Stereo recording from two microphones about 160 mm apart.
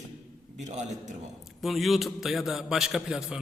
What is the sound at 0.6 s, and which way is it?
Speech, 45° right (ahead or behind).